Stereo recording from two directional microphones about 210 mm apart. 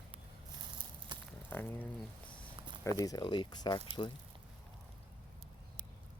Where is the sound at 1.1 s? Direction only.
20° right (ahead or behind).